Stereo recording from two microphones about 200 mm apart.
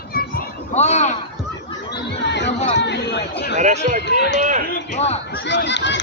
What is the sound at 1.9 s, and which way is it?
Chatter, 60° left (ahead or behind).